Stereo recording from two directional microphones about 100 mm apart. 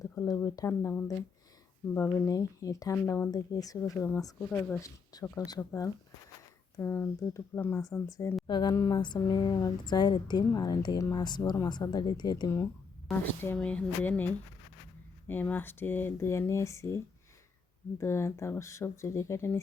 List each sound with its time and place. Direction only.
0.0 s speech: 35° left (ahead or behind)
0.7 s speech: 20° left (ahead or behind)
2.9 s speech: 20° left (ahead or behind)
3.3 s speech: 35° left (ahead or behind)
4.4 s speech: 15° left (ahead or behind)
5.1 s speech: 40° left (ahead or behind)
6.7 s speech: 25° left (ahead or behind)
8.4 s a woman's voice: 45° left (ahead or behind)
8.7 s speech: 30° left (ahead or behind)
9.0 s a woman's voice: 50° left (ahead or behind)
13.1 s speech: 20° left (ahead or behind)